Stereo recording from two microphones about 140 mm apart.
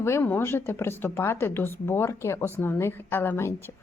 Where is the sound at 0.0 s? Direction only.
15° left (ahead or behind).